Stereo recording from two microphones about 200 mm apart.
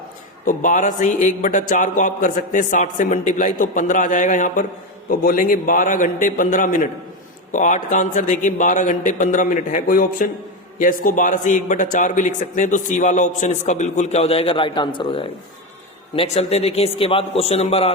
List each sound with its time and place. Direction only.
0.4 s a man's voice: 40° left (ahead or behind)